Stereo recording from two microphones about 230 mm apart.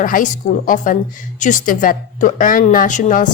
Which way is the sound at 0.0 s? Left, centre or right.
Left.